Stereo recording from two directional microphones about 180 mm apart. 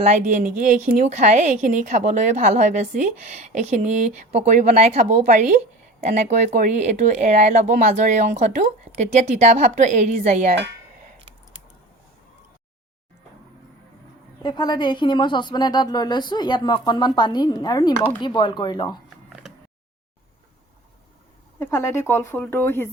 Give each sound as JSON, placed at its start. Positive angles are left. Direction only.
{"t": 0.0, "sound": "a woman's voice", "side_deg": -40}
{"t": 14.4, "sound": "speech", "side_deg": 25}
{"t": 19.3, "sound": "a sound", "side_deg": 0}
{"t": 21.6, "sound": "speech", "side_deg": 15}